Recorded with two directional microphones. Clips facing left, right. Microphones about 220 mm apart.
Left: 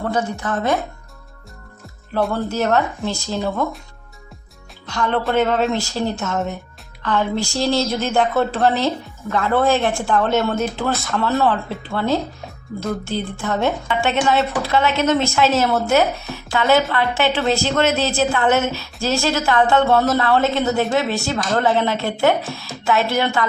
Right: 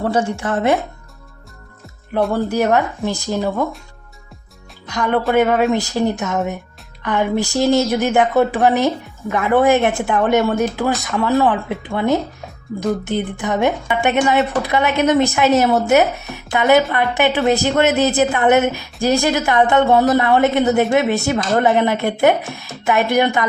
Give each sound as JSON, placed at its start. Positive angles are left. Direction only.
{"t": 0.1, "sound": "a woman's voice", "side_deg": -30}
{"t": 2.3, "sound": "speech", "side_deg": -15}
{"t": 4.9, "sound": "speech", "side_deg": -15}